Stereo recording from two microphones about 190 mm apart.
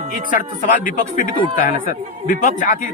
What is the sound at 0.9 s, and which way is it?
A man's voice, 45° left (ahead or behind).